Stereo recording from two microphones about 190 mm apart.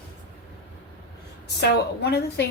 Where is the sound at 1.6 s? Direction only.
60° left (ahead or behind).